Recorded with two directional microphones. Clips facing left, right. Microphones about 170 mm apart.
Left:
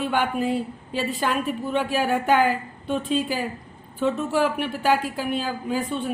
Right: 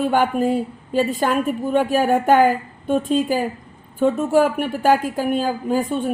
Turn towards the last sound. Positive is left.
turn(degrees=-45)  # may be behind; listen again after turning